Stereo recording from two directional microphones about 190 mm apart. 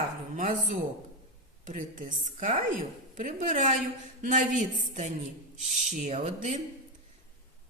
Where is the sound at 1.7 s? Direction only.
40° right (ahead or behind).